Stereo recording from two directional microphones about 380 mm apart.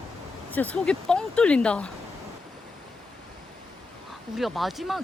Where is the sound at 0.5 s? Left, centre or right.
Centre.